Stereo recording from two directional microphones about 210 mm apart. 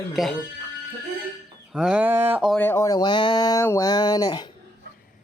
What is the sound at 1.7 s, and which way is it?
Speech, 5° right (ahead or behind).